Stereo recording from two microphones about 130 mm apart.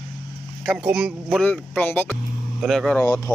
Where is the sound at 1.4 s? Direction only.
10° left (ahead or behind).